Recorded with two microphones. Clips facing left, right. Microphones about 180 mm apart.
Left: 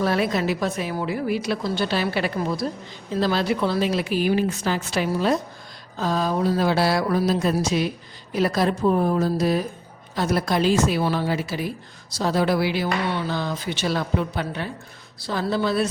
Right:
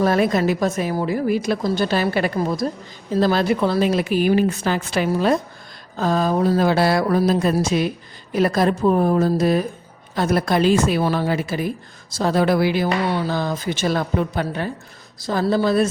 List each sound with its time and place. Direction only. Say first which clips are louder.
0.0 s a woman's voice: right 4 dB; 45° right (ahead or behind)